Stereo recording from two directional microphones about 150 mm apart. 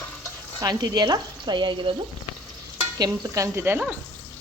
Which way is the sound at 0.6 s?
25° right (ahead or behind).